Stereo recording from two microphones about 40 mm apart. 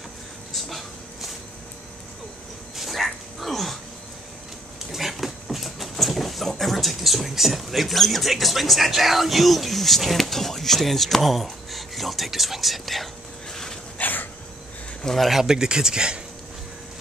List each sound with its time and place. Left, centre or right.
0.5 s a sound: centre
2.7 s dog: centre
4.9 s speech: centre
13.5 s dog: centre
13.9 s dog: left
15.0 s speech: centre
15.3 s speech: centre